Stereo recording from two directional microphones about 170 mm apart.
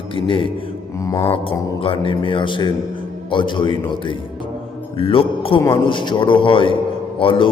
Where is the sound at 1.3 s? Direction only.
30° left (ahead or behind).